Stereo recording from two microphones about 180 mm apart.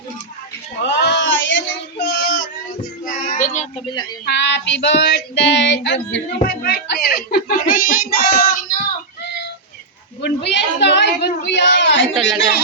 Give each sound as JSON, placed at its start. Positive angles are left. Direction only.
{"t": 0.8, "sound": "baby cry", "side_deg": 70}
{"t": 3.1, "sound": "child singing", "side_deg": 45}
{"t": 4.3, "sound": "child singing", "side_deg": 75}
{"t": 9.2, "sound": "a sound", "side_deg": 70}
{"t": 12.1, "sound": "speech", "side_deg": 0}